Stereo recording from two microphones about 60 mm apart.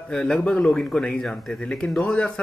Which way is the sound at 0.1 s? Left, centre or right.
Centre.